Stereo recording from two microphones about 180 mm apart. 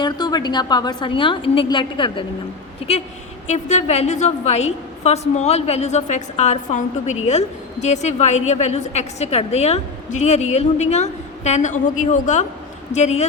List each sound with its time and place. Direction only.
0.0 s a woman's voice: 20° left (ahead or behind)
3.4 s a woman's voice: 40° left (ahead or behind)